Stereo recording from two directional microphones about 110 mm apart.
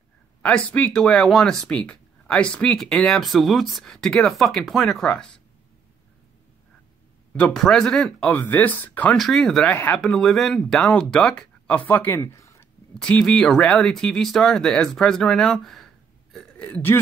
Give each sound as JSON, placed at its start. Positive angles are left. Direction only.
{"t": 0.4, "sound": "speech", "side_deg": 10}
{"t": 7.3, "sound": "speech", "side_deg": 5}
{"t": 8.3, "sound": "speech", "side_deg": 15}
{"t": 9.1, "sound": "speech", "side_deg": 5}
{"t": 12.9, "sound": "speech", "side_deg": 5}